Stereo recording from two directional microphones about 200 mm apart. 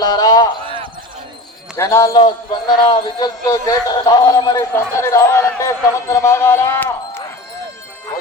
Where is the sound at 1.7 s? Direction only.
15° left (ahead or behind).